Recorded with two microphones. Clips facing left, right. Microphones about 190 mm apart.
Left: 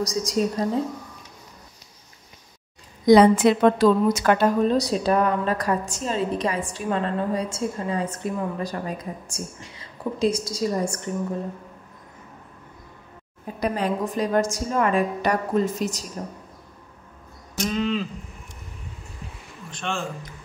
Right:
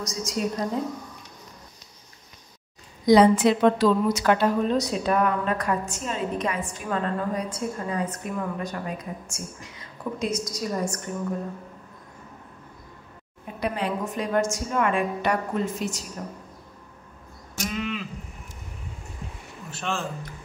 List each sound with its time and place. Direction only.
0.0 s a woman's voice: 35° left (ahead or behind)
3.1 s a woman's voice: 55° left (ahead or behind); by 11.1 s 30° left (ahead or behind)
13.6 s a woman's voice: 40° left (ahead or behind)
17.6 s a woman's voice: 30° left (ahead or behind)
19.7 s a man's voice: 5° right (ahead or behind)